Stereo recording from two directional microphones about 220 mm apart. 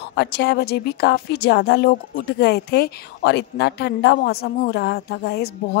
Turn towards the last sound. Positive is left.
turn(degrees=50)  # may be behind; listen again after turning